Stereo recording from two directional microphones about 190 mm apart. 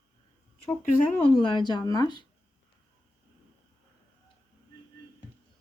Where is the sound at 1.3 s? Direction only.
25° left (ahead or behind).